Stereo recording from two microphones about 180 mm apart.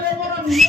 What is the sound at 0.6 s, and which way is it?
Music, centre (ahead or behind).